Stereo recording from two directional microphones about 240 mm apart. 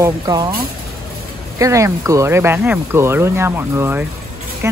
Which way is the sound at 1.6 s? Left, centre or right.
Centre.